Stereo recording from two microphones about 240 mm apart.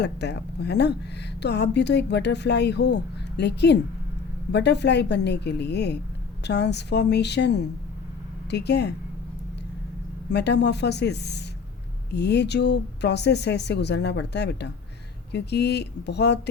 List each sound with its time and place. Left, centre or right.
0.0 s speech: left
10.3 s speech: left